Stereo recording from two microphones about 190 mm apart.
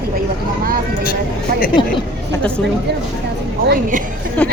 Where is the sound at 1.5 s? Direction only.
50° right (ahead or behind).